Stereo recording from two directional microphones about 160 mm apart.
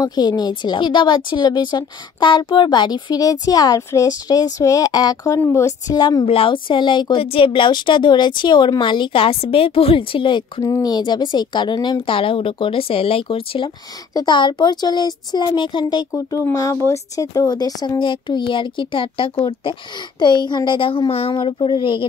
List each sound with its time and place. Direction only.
0.0 s a woman's voice: 25° left (ahead or behind)